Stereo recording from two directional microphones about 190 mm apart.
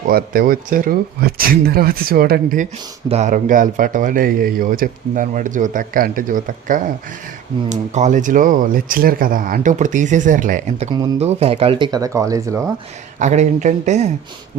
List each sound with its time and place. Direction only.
0.1 s a man's voice: 50° right (ahead or behind)
3.1 s a man's voice: 40° right (ahead or behind); by 12.7 s 15° right (ahead or behind)
13.1 s speech: 40° right (ahead or behind)